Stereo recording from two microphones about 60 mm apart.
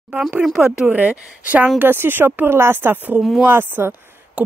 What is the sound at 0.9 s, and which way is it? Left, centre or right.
Speech, right.